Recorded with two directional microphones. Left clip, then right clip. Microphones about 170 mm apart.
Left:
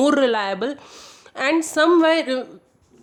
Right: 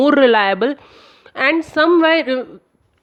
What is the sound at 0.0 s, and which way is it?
A woman's voice, 30° right (ahead or behind).